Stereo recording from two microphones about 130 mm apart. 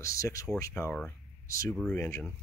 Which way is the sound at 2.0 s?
25° left (ahead or behind).